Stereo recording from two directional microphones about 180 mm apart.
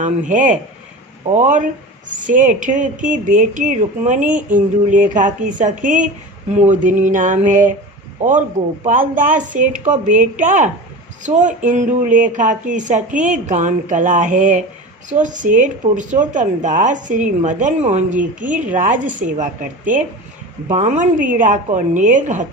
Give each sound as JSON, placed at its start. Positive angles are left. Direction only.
{"t": 0.0, "sound": "speech", "side_deg": -45}
{"t": 8.8, "sound": "speech", "side_deg": -45}